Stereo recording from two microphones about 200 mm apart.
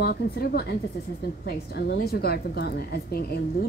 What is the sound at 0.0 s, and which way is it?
A woman's voice, 50° left (ahead or behind).